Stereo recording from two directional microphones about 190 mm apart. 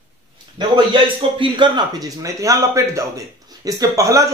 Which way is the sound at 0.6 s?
25° right (ahead or behind).